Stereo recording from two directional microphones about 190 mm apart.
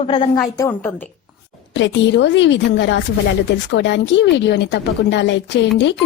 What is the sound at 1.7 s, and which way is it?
Speech, 70° left (ahead or behind).